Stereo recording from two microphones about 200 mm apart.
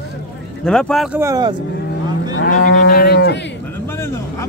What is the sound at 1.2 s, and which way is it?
Speech, 20° right (ahead or behind).